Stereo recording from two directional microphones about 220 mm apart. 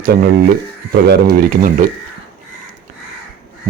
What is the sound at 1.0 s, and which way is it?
Speech, 45° right (ahead or behind).